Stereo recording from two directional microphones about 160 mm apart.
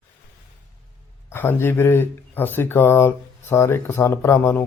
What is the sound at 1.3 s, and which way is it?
Speech, 15° left (ahead or behind).